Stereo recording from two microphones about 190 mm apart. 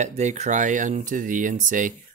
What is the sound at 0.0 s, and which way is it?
Speech, 35° right (ahead or behind).